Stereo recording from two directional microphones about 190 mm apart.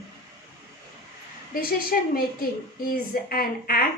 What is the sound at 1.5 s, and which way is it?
Speech, 50° left (ahead or behind).